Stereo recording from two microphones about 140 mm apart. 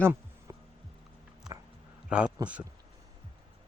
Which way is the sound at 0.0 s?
15° right (ahead or behind).